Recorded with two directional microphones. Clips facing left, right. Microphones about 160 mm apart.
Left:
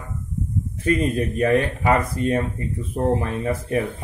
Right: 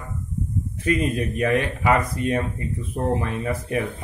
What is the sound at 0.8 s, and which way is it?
Speech, 30° left (ahead or behind).